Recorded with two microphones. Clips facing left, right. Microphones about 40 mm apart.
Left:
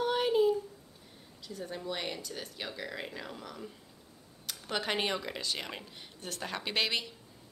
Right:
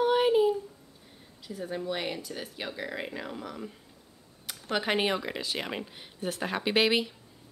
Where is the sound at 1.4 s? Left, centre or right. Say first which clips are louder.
Right 5 dB; centre.